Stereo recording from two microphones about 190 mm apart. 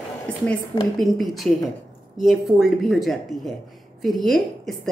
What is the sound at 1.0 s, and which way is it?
A woman's voice, centre (ahead or behind).